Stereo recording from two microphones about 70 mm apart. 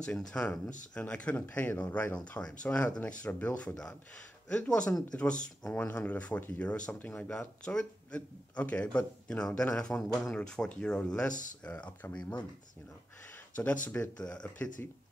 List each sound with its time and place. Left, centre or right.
0.0 s a man's voice: centre
7.2 s a man's voice: centre
13.6 s a man's voice: left